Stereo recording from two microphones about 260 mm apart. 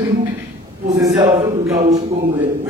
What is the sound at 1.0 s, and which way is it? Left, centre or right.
Speech, centre.